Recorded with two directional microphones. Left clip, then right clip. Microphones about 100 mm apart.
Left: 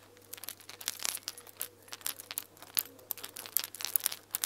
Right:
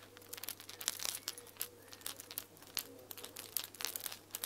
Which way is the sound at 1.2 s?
15° left (ahead or behind).